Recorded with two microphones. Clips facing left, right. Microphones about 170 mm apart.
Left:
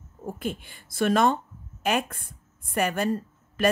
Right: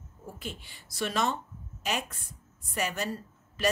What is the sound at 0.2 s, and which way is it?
A woman's voice, 50° left (ahead or behind).